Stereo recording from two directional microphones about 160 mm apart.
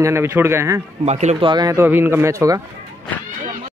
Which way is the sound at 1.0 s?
45° right (ahead or behind).